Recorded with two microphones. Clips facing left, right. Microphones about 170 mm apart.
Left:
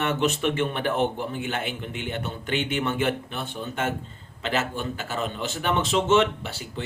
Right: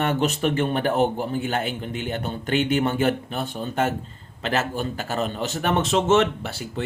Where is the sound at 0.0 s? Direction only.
40° right (ahead or behind).